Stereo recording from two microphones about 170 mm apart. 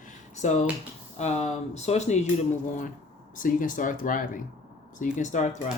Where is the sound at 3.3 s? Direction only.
50° left (ahead or behind).